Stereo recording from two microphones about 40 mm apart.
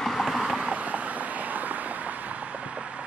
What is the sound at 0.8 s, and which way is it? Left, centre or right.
Vehicle, right.